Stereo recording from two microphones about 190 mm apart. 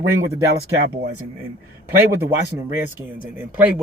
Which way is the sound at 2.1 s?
15° right (ahead or behind).